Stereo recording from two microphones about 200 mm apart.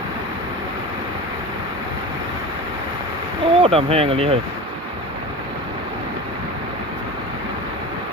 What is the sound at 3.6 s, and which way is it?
Speech, 30° right (ahead or behind).